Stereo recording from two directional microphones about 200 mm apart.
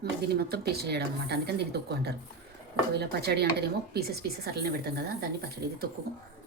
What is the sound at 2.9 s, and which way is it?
A woman's voice, 55° right (ahead or behind).